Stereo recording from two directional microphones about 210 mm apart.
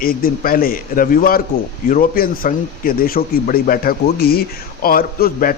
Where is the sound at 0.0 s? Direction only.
45° left (ahead or behind).